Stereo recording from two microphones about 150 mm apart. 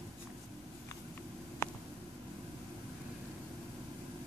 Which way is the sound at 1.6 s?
20° left (ahead or behind).